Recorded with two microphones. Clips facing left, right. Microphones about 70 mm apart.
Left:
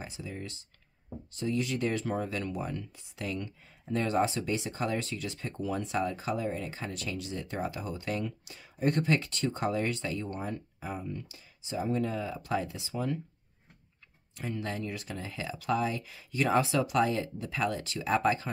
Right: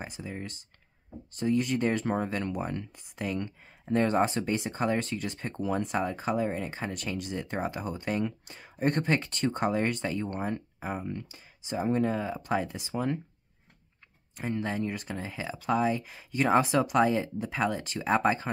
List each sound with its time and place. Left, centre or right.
0.0 s speech: right
1.4 s speech: right
3.9 s speech: right
5.5 s speech: right
9.7 s speech: right
12.7 s speech: right
14.4 s speech: right